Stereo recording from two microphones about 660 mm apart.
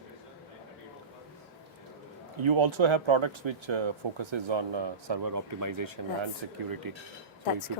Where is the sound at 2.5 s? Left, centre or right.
Right.